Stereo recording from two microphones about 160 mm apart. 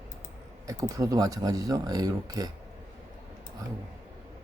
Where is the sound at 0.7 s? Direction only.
20° right (ahead or behind).